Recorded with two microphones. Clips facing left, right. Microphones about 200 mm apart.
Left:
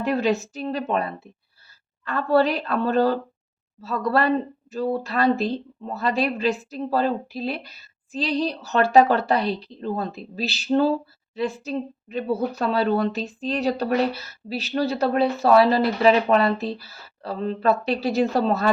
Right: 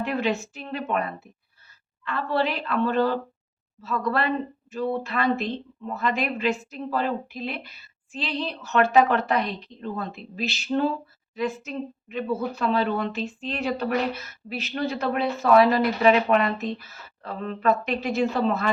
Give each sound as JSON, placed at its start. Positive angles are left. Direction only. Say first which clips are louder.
{"t": 0.0, "sound": "speech", "louder": "left 4 dB", "side_deg": 40}